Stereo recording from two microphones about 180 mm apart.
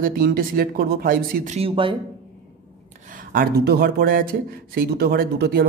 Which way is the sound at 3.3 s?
65° right (ahead or behind).